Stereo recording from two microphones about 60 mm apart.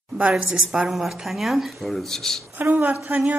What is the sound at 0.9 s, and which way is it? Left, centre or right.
A woman's voice, centre.